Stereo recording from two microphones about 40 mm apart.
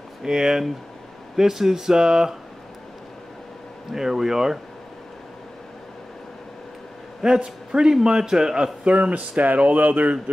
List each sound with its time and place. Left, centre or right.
0.2 s a man's voice: centre
3.9 s a man's voice: centre
7.2 s a man's voice: right
8.8 s speech: right